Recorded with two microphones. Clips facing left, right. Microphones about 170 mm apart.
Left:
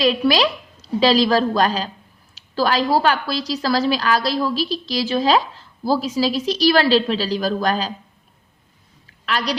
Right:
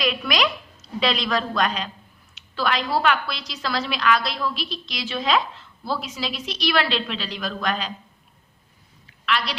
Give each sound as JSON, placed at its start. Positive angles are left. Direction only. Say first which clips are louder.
{"t": 0.0, "sound": "a woman's voice", "louder": "left 7 dB", "side_deg": 30}
{"t": 9.2, "sound": "a woman's voice", "louder": "left 3 dB", "side_deg": 40}